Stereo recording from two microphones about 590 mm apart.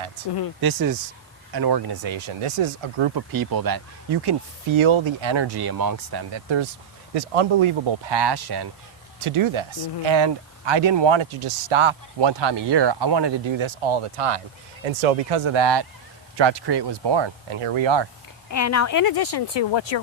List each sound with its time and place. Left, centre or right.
0.6 s speech: right
3.2 s speech: right
7.1 s speech: right
9.2 s speech: right
14.8 s speech: right
18.5 s speech: left